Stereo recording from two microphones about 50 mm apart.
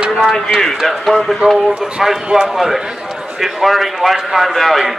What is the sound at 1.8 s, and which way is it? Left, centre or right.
A man's voice, centre.